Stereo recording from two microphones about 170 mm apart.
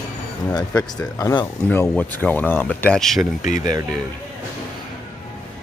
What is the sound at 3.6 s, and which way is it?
Speech, 20° right (ahead or behind).